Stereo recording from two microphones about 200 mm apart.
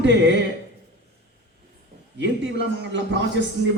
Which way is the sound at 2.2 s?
65° right (ahead or behind).